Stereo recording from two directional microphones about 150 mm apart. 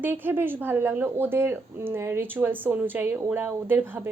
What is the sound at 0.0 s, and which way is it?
Speech, 15° right (ahead or behind).